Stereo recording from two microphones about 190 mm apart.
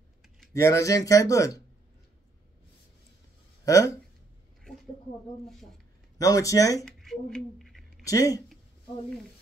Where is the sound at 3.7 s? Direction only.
15° left (ahead or behind).